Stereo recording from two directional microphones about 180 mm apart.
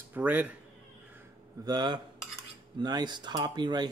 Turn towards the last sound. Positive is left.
turn(degrees=-25)  # may be behind; listen again after turning